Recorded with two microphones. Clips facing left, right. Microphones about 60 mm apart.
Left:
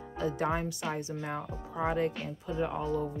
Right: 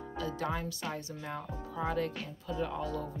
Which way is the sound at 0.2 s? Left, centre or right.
Left.